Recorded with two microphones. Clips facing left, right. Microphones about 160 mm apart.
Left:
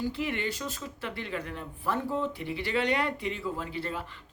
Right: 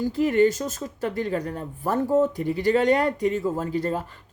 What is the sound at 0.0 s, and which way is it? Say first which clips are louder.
Speech: right 12 dB; 40° right (ahead or behind).